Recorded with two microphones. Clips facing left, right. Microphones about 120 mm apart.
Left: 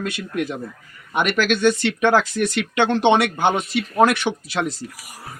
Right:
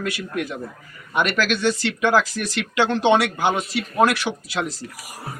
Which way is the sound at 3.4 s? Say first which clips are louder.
Left 2 dB; 25° left (ahead or behind).